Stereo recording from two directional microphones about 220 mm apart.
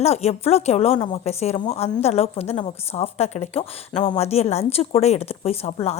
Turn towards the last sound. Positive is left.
turn(degrees=25)  # may be behind; listen again after turning